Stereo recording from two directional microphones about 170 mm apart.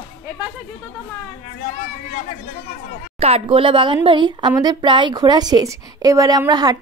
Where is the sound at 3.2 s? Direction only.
35° right (ahead or behind).